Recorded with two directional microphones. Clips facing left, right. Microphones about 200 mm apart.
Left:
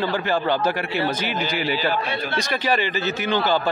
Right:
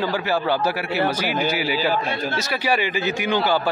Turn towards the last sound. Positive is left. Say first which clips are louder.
# even
turn(degrees=-10)  # may be behind; listen again after turning